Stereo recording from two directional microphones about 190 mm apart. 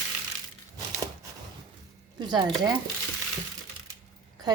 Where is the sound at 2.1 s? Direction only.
20° right (ahead or behind).